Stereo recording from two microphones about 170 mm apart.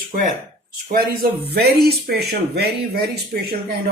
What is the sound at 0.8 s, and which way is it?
Speech, 65° right (ahead or behind).